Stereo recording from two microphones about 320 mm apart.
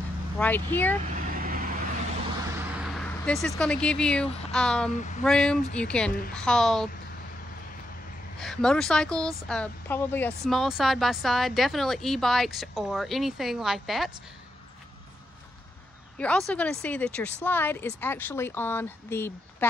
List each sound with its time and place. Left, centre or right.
0.4 s speech: centre
1.1 s vehicle: right
2.5 s vehicle: centre
4.5 s speech: centre
8.4 s speech: centre
16.2 s speech: centre